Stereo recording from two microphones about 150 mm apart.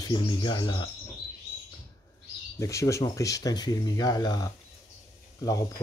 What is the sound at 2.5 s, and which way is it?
Speech, 20° left (ahead or behind).